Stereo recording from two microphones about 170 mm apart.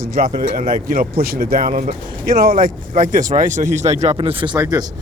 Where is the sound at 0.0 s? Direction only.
60° right (ahead or behind).